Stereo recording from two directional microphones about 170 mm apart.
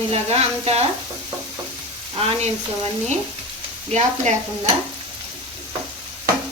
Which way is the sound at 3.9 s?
40° right (ahead or behind).